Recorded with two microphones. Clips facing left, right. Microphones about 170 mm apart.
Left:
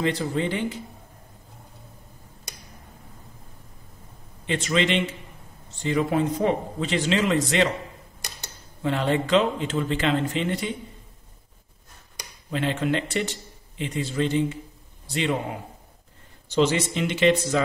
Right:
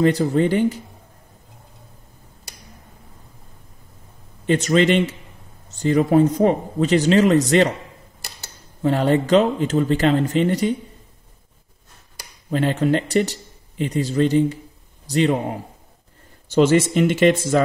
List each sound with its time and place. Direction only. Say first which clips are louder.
0.0 s speech: right 8 dB; 45° right (ahead or behind)
4.5 s speech: right 7 dB; 45° right (ahead or behind)
8.8 s speech: right 6 dB; 40° right (ahead or behind)
12.4 s a man's voice: right 6 dB; 40° right (ahead or behind)
16.4 s speech: right 6 dB; 50° right (ahead or behind)